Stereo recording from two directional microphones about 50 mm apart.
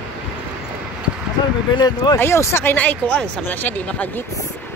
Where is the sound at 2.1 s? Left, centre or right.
Left.